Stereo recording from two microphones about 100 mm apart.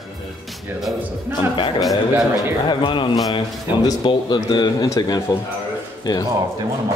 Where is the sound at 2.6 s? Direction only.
55° left (ahead or behind).